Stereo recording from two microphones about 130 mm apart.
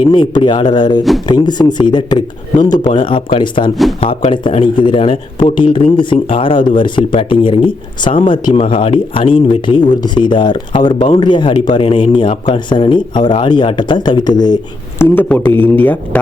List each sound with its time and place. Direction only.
0.0 s speech: 40° left (ahead or behind)
14.9 s a man's voice: 15° left (ahead or behind)